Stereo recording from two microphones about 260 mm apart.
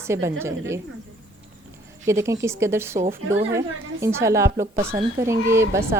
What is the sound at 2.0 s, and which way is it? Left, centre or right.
Speech, centre.